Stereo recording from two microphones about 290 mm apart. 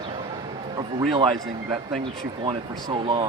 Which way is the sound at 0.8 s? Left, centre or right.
Centre.